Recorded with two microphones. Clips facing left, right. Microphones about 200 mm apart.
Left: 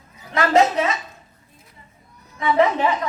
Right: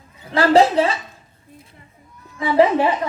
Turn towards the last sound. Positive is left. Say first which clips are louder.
# right 3 dB
turn(degrees=-30)  # may be behind; listen again after turning